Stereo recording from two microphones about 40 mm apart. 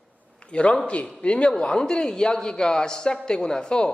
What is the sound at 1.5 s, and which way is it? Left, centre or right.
A woman's voice, centre.